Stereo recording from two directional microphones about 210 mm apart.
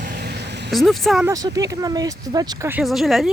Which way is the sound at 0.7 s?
Centre (ahead or behind).